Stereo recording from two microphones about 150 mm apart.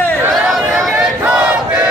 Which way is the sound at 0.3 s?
Centre (ahead or behind).